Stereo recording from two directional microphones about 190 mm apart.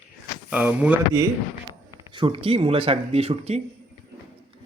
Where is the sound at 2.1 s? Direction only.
25° right (ahead or behind).